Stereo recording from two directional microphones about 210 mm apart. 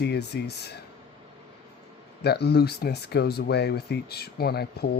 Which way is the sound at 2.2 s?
50° left (ahead or behind).